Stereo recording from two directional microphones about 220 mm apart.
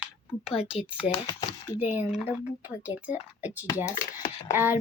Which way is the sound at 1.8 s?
10° right (ahead or behind).